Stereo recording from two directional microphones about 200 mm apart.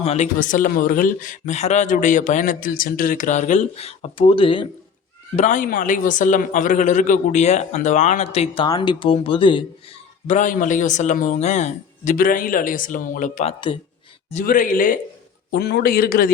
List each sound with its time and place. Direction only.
0.0 s a man's voice: 35° left (ahead or behind)
5.4 s a man's voice: 40° left (ahead or behind); by 9.6 s 25° left (ahead or behind)
10.2 s a man's voice: 40° left (ahead or behind)
14.3 s a man's voice: 40° left (ahead or behind)
15.4 s a man's voice: 55° left (ahead or behind)